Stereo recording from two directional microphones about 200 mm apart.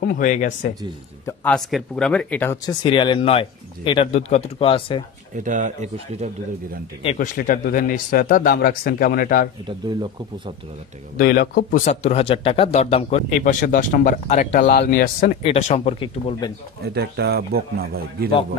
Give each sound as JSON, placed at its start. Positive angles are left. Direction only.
{"t": 0.0, "sound": "speech", "side_deg": 40}
{"t": 1.2, "sound": "speech", "side_deg": 5}
{"t": 2.8, "sound": "speech", "side_deg": 25}
{"t": 5.3, "sound": "speech", "side_deg": -40}
{"t": 7.2, "sound": "speech", "side_deg": 40}
{"t": 9.7, "sound": "speech", "side_deg": -20}
{"t": 11.1, "sound": "speech", "side_deg": 45}
{"t": 15.4, "sound": "speech", "side_deg": 35}
{"t": 16.8, "sound": "speech", "side_deg": -55}